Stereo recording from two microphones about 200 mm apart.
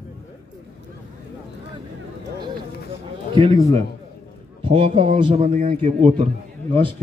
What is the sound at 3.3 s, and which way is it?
A man's voice, 25° right (ahead or behind).